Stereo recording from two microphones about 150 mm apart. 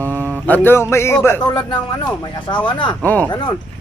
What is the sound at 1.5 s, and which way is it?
Speech, 30° left (ahead or behind).